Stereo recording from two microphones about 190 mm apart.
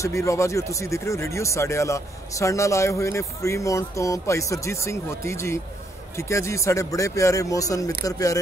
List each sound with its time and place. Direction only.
0.0 s speech: 15° left (ahead or behind)